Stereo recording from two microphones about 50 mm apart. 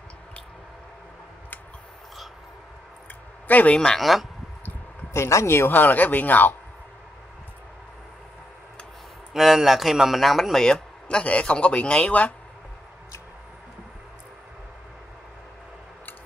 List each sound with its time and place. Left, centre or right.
3.4 s a man's voice: left
4.0 s speech: centre
5.1 s speech: left
5.8 s speech: left
9.3 s a man's voice: centre; by 12.4 s left